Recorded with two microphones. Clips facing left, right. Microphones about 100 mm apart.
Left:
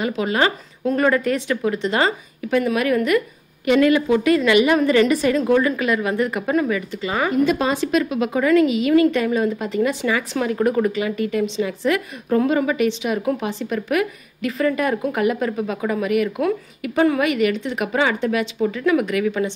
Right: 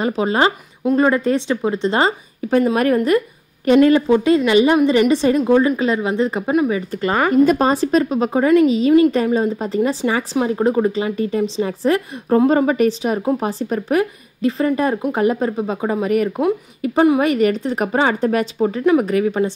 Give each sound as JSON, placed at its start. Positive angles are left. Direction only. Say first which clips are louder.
{"t": 0.0, "sound": "a woman's voice", "louder": "right 3 dB", "side_deg": -30}
{"t": 6.9, "sound": "a woman's voice", "louder": "right 5 dB", "side_deg": -50}
{"t": 17.2, "sound": "a woman's voice", "louder": "right 3 dB", "side_deg": -35}